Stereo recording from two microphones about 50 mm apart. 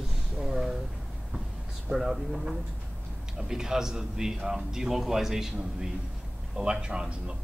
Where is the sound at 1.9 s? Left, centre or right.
Centre.